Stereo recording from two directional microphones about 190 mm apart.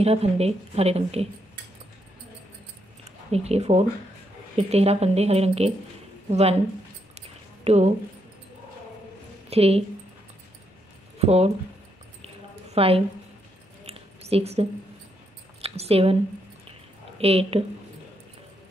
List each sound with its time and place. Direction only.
0.0 s a woman's voice: 35° right (ahead or behind)
3.3 s a woman's voice: 35° right (ahead or behind)
7.2 s a sound: 35° right (ahead or behind)
9.5 s a woman's voice: 30° right (ahead or behind)
11.1 s speech: 35° right (ahead or behind)
12.7 s a woman's voice: 30° right (ahead or behind)
13.8 s a sound: 30° right (ahead or behind)
15.6 s speech: 30° right (ahead or behind)
17.2 s a woman's voice: 30° right (ahead or behind)